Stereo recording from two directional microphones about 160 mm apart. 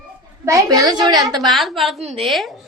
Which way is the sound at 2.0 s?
35° right (ahead or behind).